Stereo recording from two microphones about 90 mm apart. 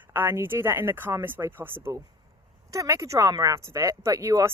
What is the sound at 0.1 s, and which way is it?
Speech, 25° right (ahead or behind).